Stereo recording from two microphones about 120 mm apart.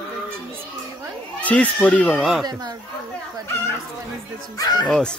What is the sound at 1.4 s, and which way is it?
Speech, 10° left (ahead or behind).